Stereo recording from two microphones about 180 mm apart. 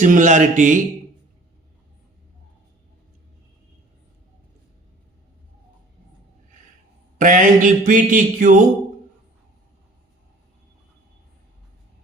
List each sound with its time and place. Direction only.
0.0 s speech: 45° right (ahead or behind)
7.2 s speech: 45° right (ahead or behind)